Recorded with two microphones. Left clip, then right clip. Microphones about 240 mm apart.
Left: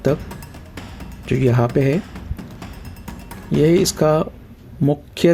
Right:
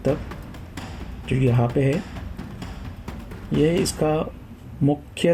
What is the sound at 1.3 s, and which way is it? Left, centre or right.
Speech, left.